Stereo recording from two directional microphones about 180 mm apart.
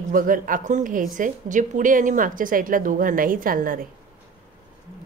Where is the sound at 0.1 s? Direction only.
50° right (ahead or behind).